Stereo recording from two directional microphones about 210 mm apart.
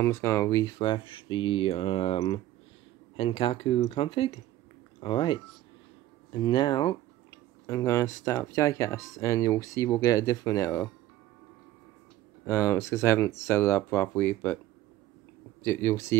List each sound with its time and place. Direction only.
0.0 s speech: 15° left (ahead or behind)
12.4 s speech: 15° left (ahead or behind)
15.6 s speech: 10° left (ahead or behind)